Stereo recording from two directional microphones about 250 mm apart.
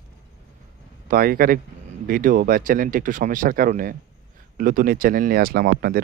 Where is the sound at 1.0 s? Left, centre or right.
Right.